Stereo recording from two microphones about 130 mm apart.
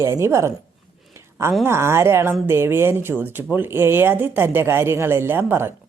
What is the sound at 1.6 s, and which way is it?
Speech, 20° right (ahead or behind).